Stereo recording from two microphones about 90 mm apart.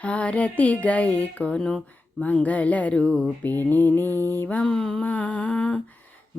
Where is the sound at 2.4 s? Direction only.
15° left (ahead or behind).